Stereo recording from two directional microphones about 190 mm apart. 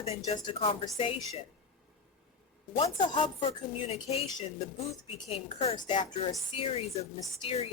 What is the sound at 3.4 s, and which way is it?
Speech, 35° left (ahead or behind).